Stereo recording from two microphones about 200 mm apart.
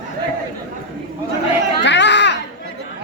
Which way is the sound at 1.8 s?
60° left (ahead or behind).